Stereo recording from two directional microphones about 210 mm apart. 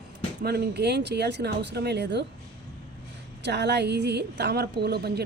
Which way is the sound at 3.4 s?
55° right (ahead or behind).